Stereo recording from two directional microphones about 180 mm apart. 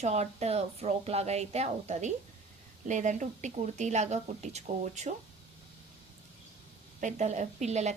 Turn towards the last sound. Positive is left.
turn(degrees=-40)  # may be behind; listen again after turning